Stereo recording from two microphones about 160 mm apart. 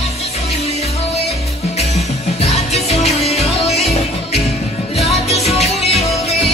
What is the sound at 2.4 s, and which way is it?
Music, 40° left (ahead or behind).